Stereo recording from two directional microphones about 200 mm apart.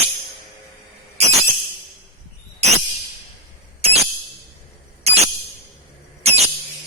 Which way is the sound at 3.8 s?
30° right (ahead or behind).